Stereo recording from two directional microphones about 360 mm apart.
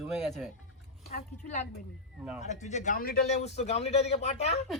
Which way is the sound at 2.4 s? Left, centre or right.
Centre.